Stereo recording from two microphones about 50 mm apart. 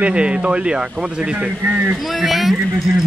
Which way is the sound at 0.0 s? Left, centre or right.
Right.